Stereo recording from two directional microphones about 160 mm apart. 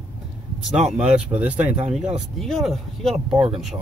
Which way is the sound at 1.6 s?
45° right (ahead or behind).